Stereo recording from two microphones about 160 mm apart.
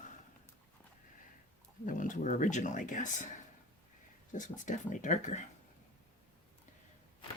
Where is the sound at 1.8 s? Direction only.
55° left (ahead or behind).